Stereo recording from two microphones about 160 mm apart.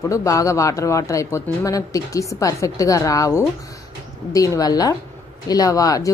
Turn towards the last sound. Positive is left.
turn(degrees=20)  # may be behind; listen again after turning